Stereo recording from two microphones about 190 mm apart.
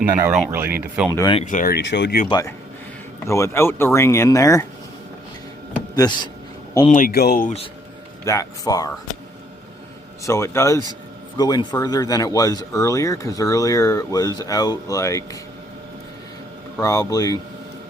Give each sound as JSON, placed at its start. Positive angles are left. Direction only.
{"t": 0.0, "sound": "speech", "side_deg": -10}
{"t": 1.5, "sound": "speech", "side_deg": 45}
{"t": 1.8, "sound": "speech", "side_deg": 65}
{"t": 3.2, "sound": "speech", "side_deg": 15}
{"t": 6.0, "sound": "speech", "side_deg": 20}
{"t": 6.9, "sound": "speech", "side_deg": 50}
{"t": 8.2, "sound": "speech", "side_deg": 15}
{"t": 10.2, "sound": "speech", "side_deg": 15}
{"t": 16.7, "sound": "speech", "side_deg": 20}